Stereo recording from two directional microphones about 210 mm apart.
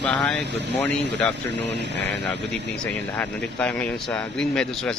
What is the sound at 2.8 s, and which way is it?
Speech, 5° left (ahead or behind).